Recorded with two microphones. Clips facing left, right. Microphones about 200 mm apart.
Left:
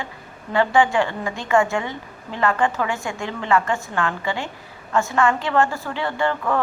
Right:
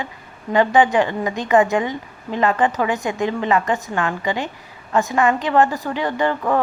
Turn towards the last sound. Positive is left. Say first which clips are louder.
# right 3 dB
turn(degrees=-15)  # may be behind; listen again after turning